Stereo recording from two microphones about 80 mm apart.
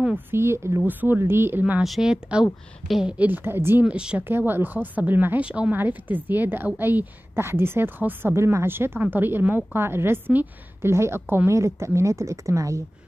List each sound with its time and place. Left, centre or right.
0.3 s speech: right
0.8 s a woman's voice: right
1.8 s a woman's voice: centre
3.2 s a woman's voice: right
3.8 s a woman's voice: centre
4.2 s a woman's voice: right
5.4 s a woman's voice: centre; by 12.8 s right